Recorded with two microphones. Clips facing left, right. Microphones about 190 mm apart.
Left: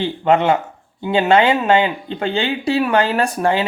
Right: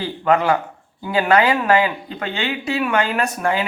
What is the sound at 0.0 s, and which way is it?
Speech, 25° left (ahead or behind).